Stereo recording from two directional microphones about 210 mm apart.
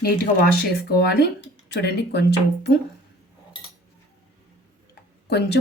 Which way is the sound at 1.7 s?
55° left (ahead or behind).